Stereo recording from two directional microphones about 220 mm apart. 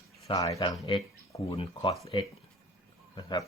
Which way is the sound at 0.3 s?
15° left (ahead or behind).